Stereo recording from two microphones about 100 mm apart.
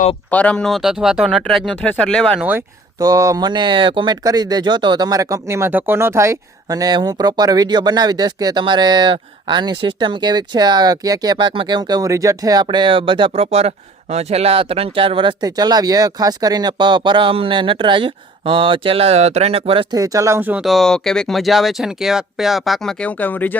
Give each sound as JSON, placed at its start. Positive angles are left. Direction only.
{"t": 0.3, "sound": "speech", "side_deg": 15}
{"t": 3.0, "sound": "speech", "side_deg": -35}
{"t": 12.6, "sound": "speech", "side_deg": -55}
{"t": 15.4, "sound": "speech", "side_deg": -40}
{"t": 19.9, "sound": "speech", "side_deg": -35}
{"t": 20.6, "sound": "speech", "side_deg": 0}